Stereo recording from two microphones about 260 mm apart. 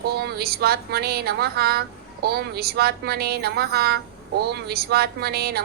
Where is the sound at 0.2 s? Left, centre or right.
Right.